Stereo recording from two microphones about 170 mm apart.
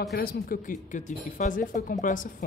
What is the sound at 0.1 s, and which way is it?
Speech, 60° left (ahead or behind).